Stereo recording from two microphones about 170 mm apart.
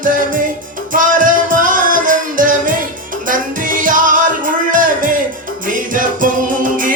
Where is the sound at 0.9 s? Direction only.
50° right (ahead or behind).